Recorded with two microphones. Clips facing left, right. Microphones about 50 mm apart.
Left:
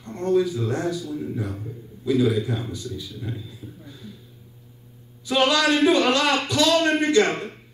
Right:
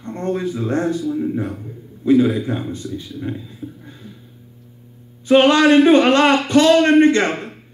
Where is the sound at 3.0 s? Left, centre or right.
Right.